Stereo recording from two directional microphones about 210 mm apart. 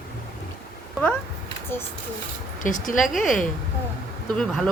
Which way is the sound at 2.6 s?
40° left (ahead or behind).